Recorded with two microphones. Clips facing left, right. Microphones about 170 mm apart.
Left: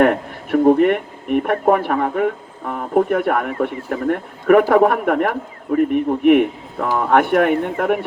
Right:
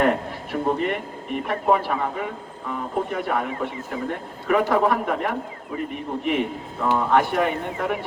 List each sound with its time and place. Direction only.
0.0 s speech: 60° left (ahead or behind)